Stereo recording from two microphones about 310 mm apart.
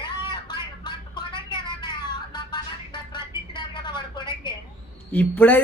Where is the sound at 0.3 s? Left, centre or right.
Centre.